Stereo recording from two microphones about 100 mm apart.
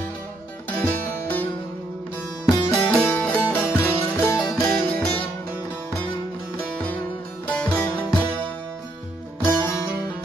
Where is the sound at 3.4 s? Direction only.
15° right (ahead or behind).